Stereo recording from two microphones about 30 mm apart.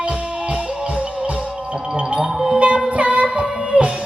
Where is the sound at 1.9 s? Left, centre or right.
Right.